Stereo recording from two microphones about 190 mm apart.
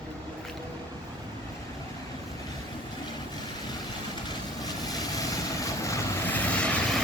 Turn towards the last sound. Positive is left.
turn(degrees=5)  # may be behind; listen again after turning